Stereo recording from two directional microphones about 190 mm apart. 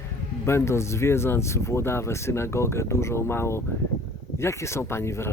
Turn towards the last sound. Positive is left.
turn(degrees=15)  # may be behind; listen again after turning